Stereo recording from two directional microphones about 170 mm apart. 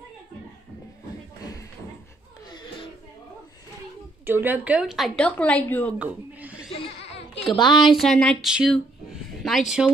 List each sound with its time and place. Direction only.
4.3 s a woman's voice: 10° right (ahead or behind); by 5.9 s 10° left (ahead or behind)
5.9 s a sound: 10° right (ahead or behind)
7.5 s a woman's voice: 25° left (ahead or behind)
7.8 s a woman's voice: centre (ahead or behind)